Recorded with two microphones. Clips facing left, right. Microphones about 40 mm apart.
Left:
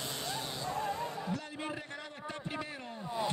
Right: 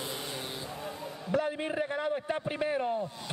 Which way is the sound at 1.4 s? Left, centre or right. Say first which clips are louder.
Right 10 dB; right.